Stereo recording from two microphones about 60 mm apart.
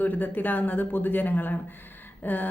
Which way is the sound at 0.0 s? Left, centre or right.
Left.